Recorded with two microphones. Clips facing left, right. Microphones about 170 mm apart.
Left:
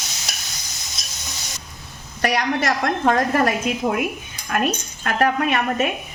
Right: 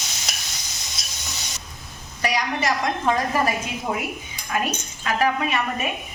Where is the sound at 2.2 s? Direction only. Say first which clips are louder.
Left 3 dB; 65° left (ahead or behind).